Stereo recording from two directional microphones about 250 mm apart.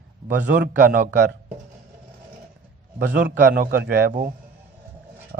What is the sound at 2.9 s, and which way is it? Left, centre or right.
A man's voice, right.